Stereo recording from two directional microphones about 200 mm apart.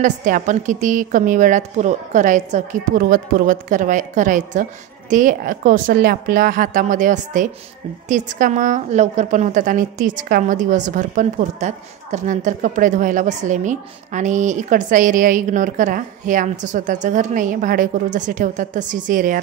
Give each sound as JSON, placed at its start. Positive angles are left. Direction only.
{"t": 0.0, "sound": "a woman's voice", "side_deg": -40}